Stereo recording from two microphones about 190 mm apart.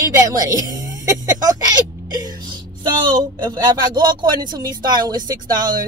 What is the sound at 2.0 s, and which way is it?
A woman's voice, 20° right (ahead or behind).